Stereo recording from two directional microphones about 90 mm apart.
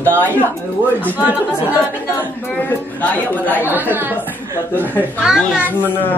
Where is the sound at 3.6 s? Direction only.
20° right (ahead or behind).